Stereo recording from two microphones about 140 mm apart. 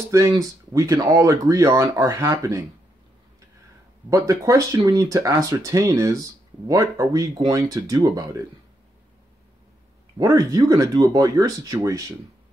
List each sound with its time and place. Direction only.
0.1 s speech: 25° right (ahead or behind)
4.1 s speech: 20° right (ahead or behind)
10.1 s speech: 25° right (ahead or behind)